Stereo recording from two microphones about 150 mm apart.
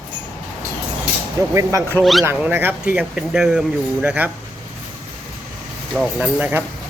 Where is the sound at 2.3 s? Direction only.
15° right (ahead or behind).